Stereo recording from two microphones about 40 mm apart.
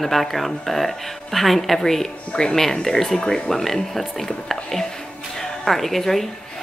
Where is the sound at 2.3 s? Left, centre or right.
Centre.